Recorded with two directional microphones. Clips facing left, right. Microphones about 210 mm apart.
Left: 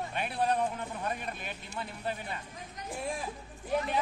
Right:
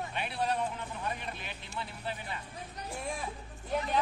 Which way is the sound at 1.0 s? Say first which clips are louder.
Left 1 dB; 50° left (ahead or behind).